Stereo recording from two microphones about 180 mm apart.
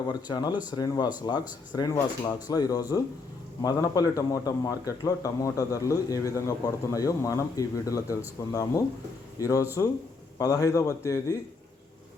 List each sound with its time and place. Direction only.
0.1 s a man's voice: 25° left (ahead or behind)